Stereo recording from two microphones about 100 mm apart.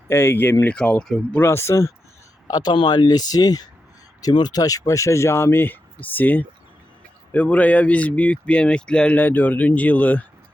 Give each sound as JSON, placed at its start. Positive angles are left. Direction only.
{"t": 0.1, "sound": "speech", "side_deg": 25}
{"t": 1.4, "sound": "speech", "side_deg": 25}
{"t": 2.5, "sound": "speech", "side_deg": 45}